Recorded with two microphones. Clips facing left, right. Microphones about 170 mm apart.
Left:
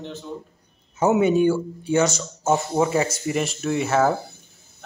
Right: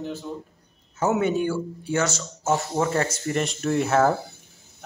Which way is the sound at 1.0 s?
15° left (ahead or behind).